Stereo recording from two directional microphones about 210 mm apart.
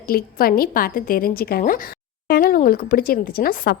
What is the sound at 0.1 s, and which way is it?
A woman's voice, 45° left (ahead or behind).